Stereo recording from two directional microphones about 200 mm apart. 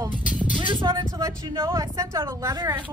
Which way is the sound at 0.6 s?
25° right (ahead or behind).